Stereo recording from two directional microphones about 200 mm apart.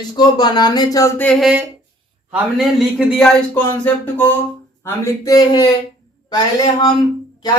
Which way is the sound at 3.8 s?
10° left (ahead or behind).